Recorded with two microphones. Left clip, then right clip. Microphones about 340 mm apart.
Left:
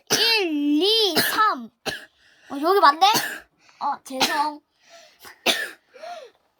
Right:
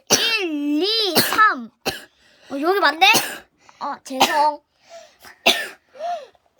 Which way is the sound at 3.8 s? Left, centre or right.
Centre.